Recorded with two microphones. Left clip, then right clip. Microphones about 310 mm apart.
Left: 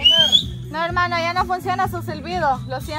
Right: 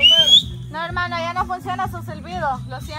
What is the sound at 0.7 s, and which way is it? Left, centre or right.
Speech, left.